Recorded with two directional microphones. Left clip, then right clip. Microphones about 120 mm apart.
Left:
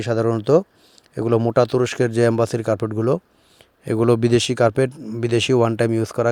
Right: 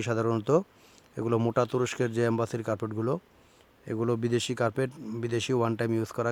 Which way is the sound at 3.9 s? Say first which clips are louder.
Left 12 dB; 90° left.